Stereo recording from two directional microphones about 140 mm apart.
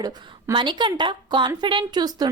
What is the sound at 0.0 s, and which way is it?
A woman's voice, 30° right (ahead or behind).